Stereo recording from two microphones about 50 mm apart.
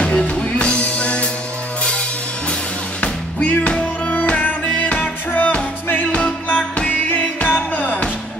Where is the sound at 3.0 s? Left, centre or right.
Left.